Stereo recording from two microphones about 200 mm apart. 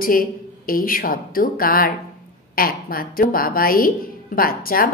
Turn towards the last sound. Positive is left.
turn(degrees=45)  # may be behind; listen again after turning